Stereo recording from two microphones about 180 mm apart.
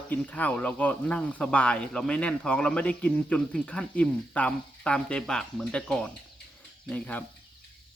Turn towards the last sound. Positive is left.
turn(degrees=5)  # may be behind; listen again after turning